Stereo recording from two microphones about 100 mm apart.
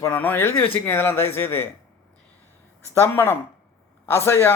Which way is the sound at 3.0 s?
25° left (ahead or behind).